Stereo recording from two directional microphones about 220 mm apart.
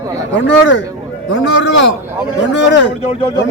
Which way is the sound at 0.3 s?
55° left (ahead or behind).